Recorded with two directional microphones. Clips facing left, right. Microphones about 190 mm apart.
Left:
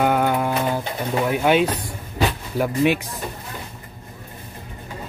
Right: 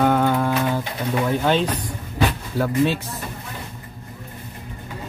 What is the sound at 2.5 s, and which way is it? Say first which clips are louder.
Speech: left 2 dB; 15° left (ahead or behind).